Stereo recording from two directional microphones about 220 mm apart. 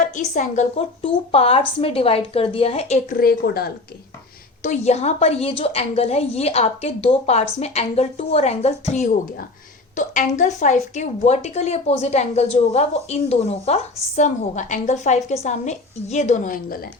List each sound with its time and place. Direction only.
0.2 s a woman's voice: 35° left (ahead or behind)
4.6 s a woman's voice: 30° left (ahead or behind)